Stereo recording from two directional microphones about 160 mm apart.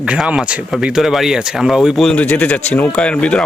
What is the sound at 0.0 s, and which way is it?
Speech, 5° right (ahead or behind).